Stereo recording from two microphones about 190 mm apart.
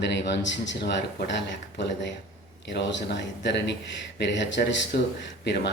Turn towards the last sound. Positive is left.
turn(degrees=65)  # may be behind; listen again after turning